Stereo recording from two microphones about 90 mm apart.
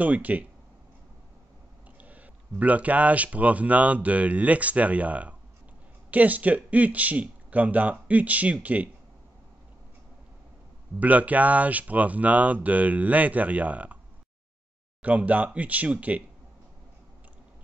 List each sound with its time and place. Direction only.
0.0 s speech: 20° right (ahead or behind)
2.0 s speech: 15° right (ahead or behind)
11.0 s speech: 15° right (ahead or behind)
15.0 s speech: 15° right (ahead or behind)